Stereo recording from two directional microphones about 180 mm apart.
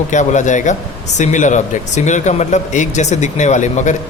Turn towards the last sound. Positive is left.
turn(degrees=40)  # may be behind; listen again after turning